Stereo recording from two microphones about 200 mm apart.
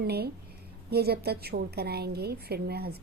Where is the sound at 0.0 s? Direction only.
55° right (ahead or behind).